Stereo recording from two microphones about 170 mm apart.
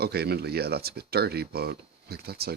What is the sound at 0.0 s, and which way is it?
Speech, 70° right (ahead or behind).